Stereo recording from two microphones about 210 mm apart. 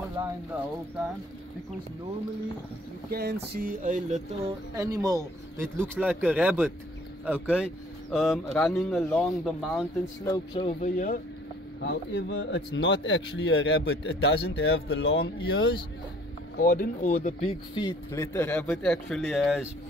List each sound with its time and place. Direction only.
3.1 s speech: 50° right (ahead or behind)
4.7 s speech: 15° right (ahead or behind)
10.2 s speech: 20° left (ahead or behind)
10.8 s speech: 40° left (ahead or behind)
11.8 s speech: 50° left (ahead or behind)
16.5 s speech: 40° left (ahead or behind)
17.7 s speech: 15° left (ahead or behind); by 19.6 s centre (ahead or behind)